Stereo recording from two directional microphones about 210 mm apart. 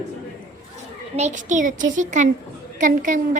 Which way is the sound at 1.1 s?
35° right (ahead or behind).